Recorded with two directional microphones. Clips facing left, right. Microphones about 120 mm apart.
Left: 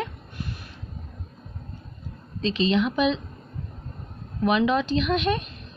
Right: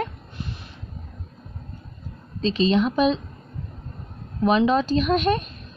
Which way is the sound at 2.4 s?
35° right (ahead or behind).